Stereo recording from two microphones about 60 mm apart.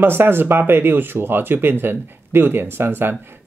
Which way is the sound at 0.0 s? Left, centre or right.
Right.